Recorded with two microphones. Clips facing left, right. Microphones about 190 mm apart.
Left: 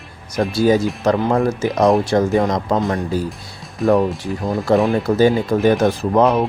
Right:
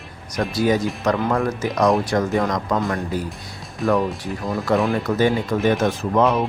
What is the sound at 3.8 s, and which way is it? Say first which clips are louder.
Speech: left 4 dB; centre (ahead or behind).